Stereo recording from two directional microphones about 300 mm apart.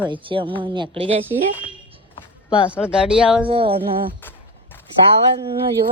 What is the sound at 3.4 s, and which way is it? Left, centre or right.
Speech, centre.